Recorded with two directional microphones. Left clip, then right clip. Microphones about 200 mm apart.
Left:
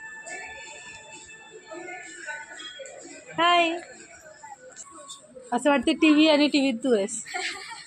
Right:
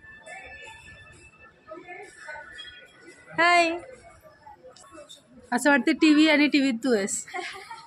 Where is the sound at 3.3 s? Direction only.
15° right (ahead or behind).